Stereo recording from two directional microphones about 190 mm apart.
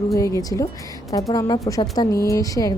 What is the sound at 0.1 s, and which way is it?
A woman's voice, 15° left (ahead or behind).